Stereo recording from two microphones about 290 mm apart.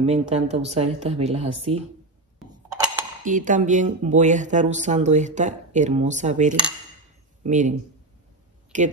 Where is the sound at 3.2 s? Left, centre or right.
Right.